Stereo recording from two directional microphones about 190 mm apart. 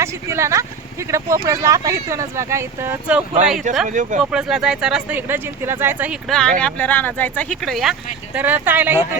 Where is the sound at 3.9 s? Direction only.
40° right (ahead or behind).